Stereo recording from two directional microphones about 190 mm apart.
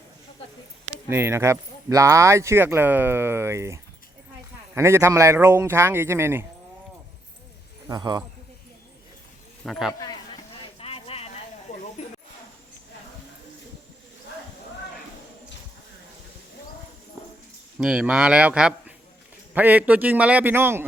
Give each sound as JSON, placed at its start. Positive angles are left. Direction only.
{"t": 1.0, "sound": "speech", "side_deg": -15}
{"t": 7.9, "sound": "a man's voice", "side_deg": -20}
{"t": 9.6, "sound": "a man's voice", "side_deg": 0}
{"t": 10.8, "sound": "a sound", "side_deg": 30}
{"t": 11.7, "sound": "snake", "side_deg": 35}
{"t": 17.7, "sound": "a man's voice", "side_deg": -5}